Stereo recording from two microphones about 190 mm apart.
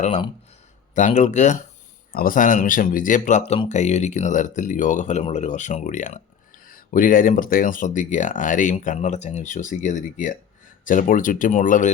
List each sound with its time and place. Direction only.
0.9 s speech: 40° left (ahead or behind)